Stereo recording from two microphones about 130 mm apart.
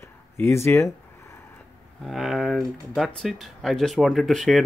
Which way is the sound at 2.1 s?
Centre (ahead or behind).